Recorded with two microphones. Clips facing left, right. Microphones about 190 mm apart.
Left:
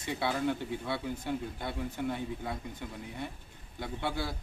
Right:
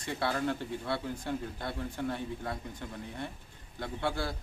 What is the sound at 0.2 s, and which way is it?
A man's voice, 10° left (ahead or behind).